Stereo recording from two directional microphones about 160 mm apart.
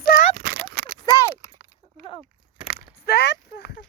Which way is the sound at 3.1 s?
85° left.